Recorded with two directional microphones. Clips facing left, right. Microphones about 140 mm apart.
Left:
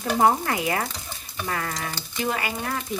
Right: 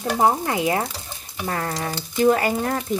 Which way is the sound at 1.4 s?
35° right (ahead or behind).